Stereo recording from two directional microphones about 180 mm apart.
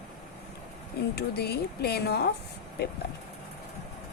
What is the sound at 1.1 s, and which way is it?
A woman's voice, 65° left (ahead or behind).